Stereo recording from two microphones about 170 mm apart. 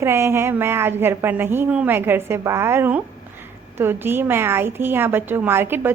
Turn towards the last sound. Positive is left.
turn(degrees=-10)  # may be behind; listen again after turning